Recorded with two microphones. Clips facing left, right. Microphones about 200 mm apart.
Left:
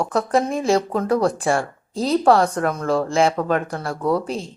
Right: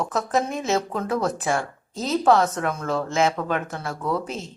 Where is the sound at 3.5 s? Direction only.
45° left (ahead or behind).